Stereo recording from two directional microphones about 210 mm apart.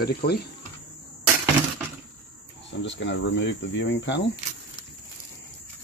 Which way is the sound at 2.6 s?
60° left (ahead or behind).